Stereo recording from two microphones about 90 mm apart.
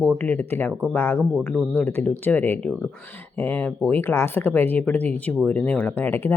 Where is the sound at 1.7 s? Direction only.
20° left (ahead or behind).